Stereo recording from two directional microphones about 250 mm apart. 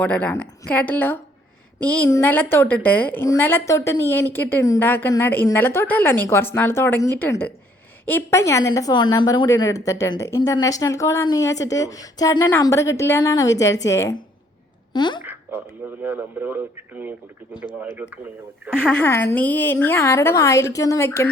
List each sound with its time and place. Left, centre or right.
0.0 s a woman's voice: centre
15.2 s a sound: centre
16.0 s speech: centre
18.8 s a woman's voice: centre